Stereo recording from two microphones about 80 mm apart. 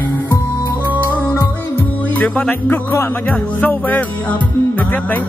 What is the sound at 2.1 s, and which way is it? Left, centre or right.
Music, centre.